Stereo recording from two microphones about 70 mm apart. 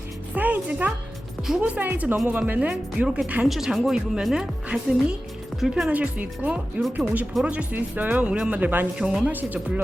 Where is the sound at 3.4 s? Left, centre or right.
Centre.